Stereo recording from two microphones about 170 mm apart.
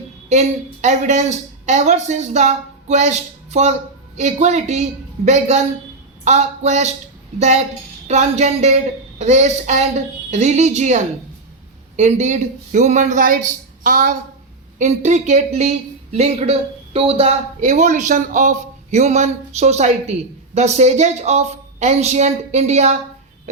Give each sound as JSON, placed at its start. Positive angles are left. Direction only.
{"t": 0.3, "sound": "a woman's voice", "side_deg": -40}
{"t": 14.8, "sound": "speech", "side_deg": -45}